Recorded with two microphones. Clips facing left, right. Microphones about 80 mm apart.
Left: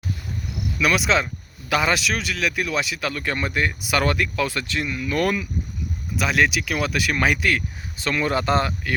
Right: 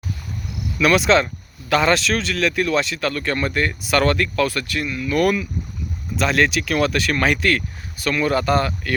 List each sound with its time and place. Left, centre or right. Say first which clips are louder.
0.8 s speech: right 5 dB; centre; by 5.5 s left
6.1 s speech: right 2 dB; centre
7.9 s speech: right 3 dB; left